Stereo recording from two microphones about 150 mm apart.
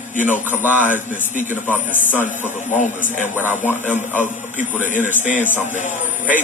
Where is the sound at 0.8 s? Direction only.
60° left (ahead or behind).